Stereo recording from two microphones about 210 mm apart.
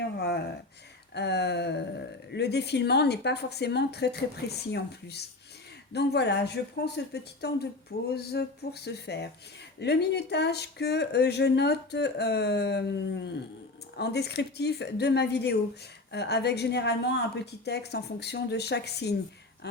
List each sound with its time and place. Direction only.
1.1 s speech: 55° left (ahead or behind)